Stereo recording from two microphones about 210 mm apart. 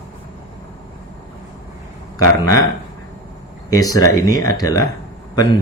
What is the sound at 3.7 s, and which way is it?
Speech, 15° left (ahead or behind).